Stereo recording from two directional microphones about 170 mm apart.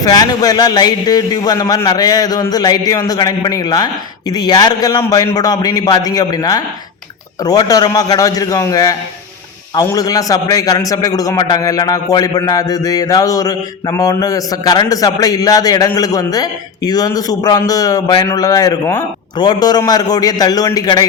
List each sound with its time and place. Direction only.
0.0 s a man's voice: 25° left (ahead or behind)